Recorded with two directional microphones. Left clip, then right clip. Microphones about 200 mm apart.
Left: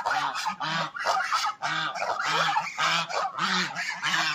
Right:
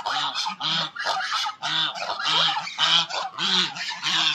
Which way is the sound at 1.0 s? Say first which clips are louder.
Even; 10° left (ahead or behind).